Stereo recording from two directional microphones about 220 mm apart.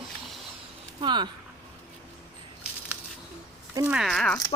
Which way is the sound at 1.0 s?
20° right (ahead or behind).